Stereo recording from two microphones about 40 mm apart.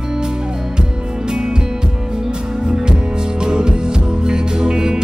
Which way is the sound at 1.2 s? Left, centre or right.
Centre.